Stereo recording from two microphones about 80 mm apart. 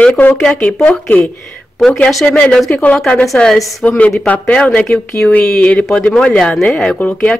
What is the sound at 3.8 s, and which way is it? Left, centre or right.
Speech, centre.